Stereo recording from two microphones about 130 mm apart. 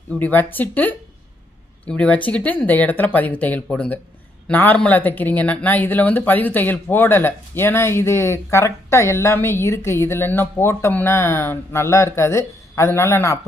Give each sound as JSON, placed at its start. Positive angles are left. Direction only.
{"t": 0.2, "sound": "speech", "side_deg": 15}